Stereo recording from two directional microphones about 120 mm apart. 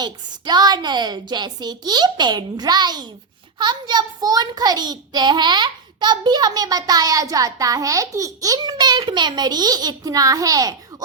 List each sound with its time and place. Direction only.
0.0 s a child's voice: 35° right (ahead or behind)